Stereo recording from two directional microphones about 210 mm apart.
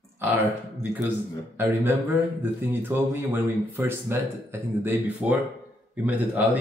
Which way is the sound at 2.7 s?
10° right (ahead or behind).